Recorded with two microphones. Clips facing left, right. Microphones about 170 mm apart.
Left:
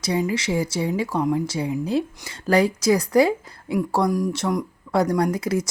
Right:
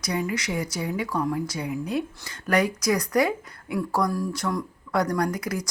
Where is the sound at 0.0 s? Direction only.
25° left (ahead or behind).